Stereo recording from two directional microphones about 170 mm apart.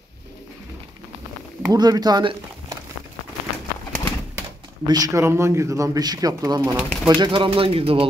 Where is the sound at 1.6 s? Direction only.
25° right (ahead or behind).